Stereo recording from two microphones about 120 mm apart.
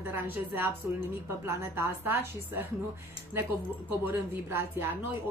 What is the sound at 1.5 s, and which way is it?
Speech, 20° right (ahead or behind).